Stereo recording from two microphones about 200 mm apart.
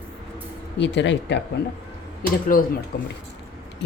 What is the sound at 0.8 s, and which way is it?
Speech, 65° left (ahead or behind).